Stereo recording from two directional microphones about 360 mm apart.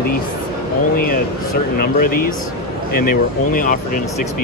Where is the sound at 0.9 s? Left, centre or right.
Left.